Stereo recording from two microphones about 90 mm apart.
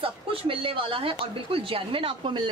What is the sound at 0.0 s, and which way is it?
A woman's voice, 90° right.